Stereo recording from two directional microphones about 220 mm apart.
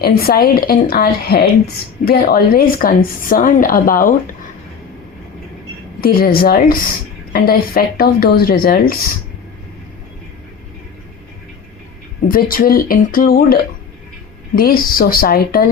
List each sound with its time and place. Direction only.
0.0 s a woman's voice: 45° left (ahead or behind)
6.0 s a woman's voice: 40° left (ahead or behind)
12.3 s a woman's voice: 40° left (ahead or behind)